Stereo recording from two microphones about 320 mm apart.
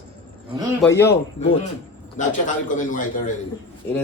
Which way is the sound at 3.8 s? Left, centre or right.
Centre.